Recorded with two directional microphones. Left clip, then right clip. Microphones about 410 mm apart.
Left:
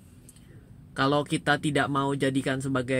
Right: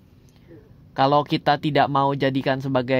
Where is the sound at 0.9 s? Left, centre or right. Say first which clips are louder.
Right 7 dB; centre.